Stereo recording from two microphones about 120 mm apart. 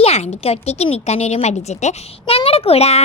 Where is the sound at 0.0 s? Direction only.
60° left (ahead or behind).